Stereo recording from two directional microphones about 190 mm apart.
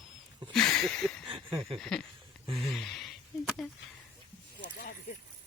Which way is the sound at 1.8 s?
Centre (ahead or behind).